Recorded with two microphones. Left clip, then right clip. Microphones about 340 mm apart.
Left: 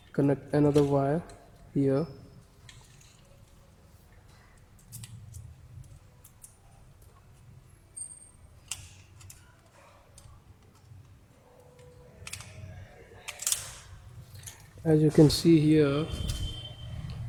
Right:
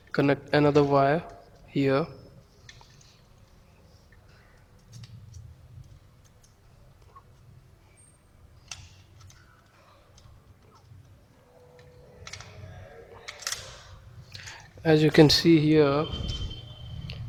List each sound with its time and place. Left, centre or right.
0.1 s a man's voice: right
14.8 s speech: right
15.4 s speech: centre